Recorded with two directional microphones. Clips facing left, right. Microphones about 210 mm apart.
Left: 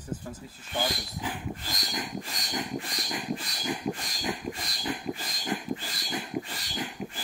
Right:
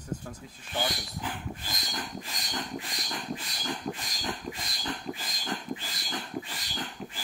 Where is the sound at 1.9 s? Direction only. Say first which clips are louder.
Left 3 dB; 10° left (ahead or behind).